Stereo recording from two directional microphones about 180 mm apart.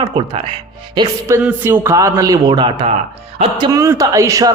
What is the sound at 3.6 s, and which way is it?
Speech, 15° right (ahead or behind).